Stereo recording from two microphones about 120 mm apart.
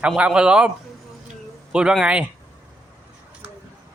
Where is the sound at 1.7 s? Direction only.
5° right (ahead or behind).